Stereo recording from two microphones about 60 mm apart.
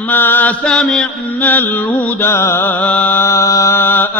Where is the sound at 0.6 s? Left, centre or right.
Centre.